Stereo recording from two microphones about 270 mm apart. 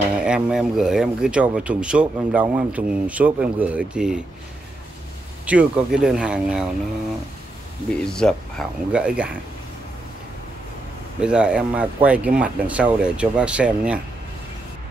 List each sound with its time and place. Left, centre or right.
0.2 s speech: centre
5.5 s speech: centre
8.0 s speech: centre
11.1 s speech: centre